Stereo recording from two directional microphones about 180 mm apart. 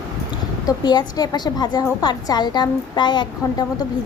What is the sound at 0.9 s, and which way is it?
A woman's voice, 20° left (ahead or behind).